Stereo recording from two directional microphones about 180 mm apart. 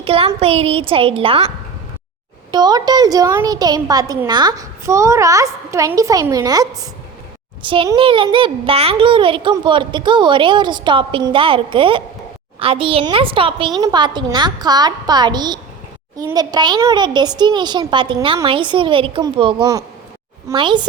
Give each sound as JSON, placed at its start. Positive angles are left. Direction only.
{"t": 0.0, "sound": "speech", "side_deg": -30}
{"t": 2.5, "sound": "a child's voice", "side_deg": -25}